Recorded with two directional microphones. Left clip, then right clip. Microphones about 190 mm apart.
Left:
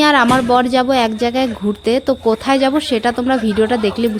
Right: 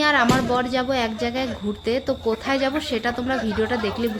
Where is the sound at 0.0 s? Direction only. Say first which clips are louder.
Left 7 dB; 35° left (ahead or behind).